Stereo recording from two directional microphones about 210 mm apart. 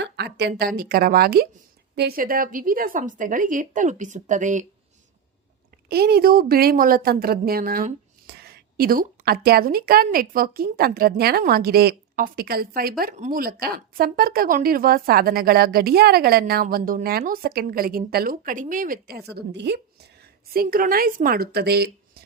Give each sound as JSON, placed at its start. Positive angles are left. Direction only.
{"t": 0.0, "sound": "a woman's voice", "side_deg": -50}
{"t": 5.9, "sound": "a woman's voice", "side_deg": -50}